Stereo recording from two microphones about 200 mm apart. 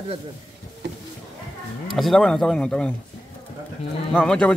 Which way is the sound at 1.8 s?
Centre (ahead or behind).